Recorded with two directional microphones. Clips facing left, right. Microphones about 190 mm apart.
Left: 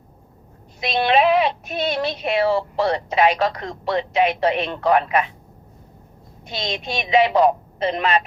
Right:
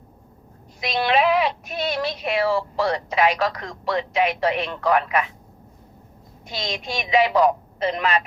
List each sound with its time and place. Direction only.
0.8 s speech: 25° left (ahead or behind)
6.4 s a woman's voice: 25° left (ahead or behind)